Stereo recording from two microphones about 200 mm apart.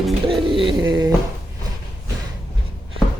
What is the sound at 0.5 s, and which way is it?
Speech, 25° right (ahead or behind).